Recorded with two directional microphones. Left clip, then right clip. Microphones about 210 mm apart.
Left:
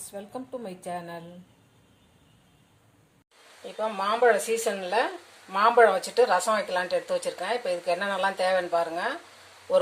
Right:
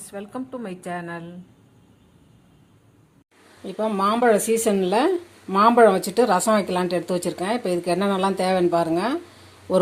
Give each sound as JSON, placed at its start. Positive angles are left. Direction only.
{"t": 0.0, "sound": "a woman's voice", "side_deg": 0}
{"t": 3.8, "sound": "speech", "side_deg": -20}